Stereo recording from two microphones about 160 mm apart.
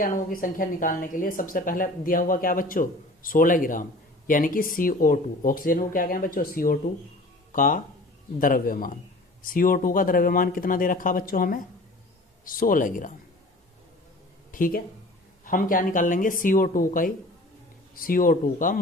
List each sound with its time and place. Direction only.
0.0 s a woman's voice: 60° left (ahead or behind)
14.5 s a woman's voice: 60° left (ahead or behind)